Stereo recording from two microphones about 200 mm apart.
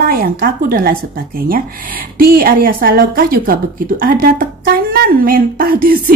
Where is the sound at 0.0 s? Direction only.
50° right (ahead or behind).